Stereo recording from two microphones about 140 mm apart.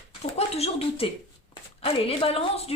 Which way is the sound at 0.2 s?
50° left (ahead or behind).